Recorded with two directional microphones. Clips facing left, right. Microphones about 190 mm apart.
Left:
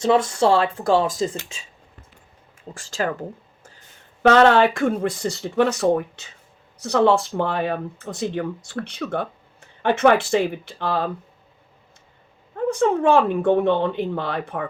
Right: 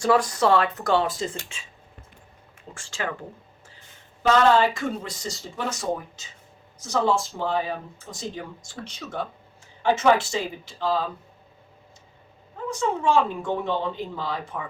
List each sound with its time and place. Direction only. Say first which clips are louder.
0.0 s speech: left 3 dB; 25° left (ahead or behind)
1.0 s speech: left 5 dB; 40° left (ahead or behind)
2.7 s speech: left 6 dB; 40° left (ahead or behind)
4.2 s speech: left 4 dB; 65° left (ahead or behind)
12.5 s speech: left 7 dB; 60° left (ahead or behind)